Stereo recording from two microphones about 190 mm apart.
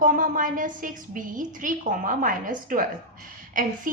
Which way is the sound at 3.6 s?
45° right (ahead or behind).